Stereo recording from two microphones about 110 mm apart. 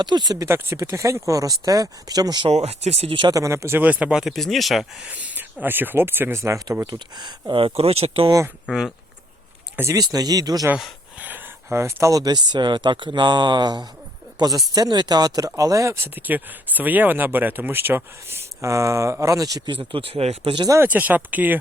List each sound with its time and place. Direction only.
0.0 s speech: 40° right (ahead or behind)
0.4 s speech: 25° right (ahead or behind)
2.5 s speech: 75° right (ahead or behind); by 3.2 s 60° right (ahead or behind)
3.2 s speech: 30° right (ahead or behind); by 4.9 s centre (ahead or behind)
5.0 s speech: 15° right (ahead or behind)
7.2 s speech: 40° right (ahead or behind)
7.6 s speech: 60° right (ahead or behind)
8.6 s speech: 5° right (ahead or behind)
9.9 s speech: 35° right (ahead or behind)
11.2 s speech: 20° right (ahead or behind)
16.1 s speech: 15° right (ahead or behind); by 19.7 s 35° right (ahead or behind)
19.7 s speech: 55° right (ahead or behind)
20.7 s speech: 15° right (ahead or behind)